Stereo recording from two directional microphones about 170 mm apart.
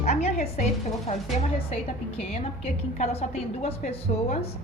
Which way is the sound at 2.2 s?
35° left (ahead or behind).